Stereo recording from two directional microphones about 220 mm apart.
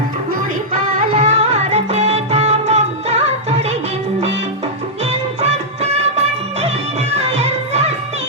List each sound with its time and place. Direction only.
1.1 s music: 30° right (ahead or behind)
5.4 s music: 30° right (ahead or behind)
7.2 s music: 30° right (ahead or behind)